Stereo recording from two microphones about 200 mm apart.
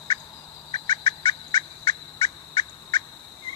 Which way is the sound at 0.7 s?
25° left (ahead or behind).